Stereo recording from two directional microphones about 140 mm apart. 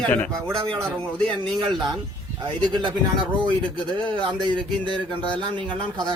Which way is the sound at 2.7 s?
35° right (ahead or behind).